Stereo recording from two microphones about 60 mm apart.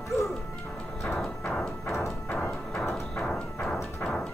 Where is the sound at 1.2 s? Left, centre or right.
Centre.